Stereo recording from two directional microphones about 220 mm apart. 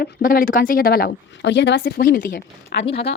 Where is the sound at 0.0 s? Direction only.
40° left (ahead or behind).